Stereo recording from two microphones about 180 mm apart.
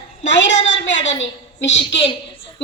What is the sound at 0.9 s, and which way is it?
Speech, 90° left.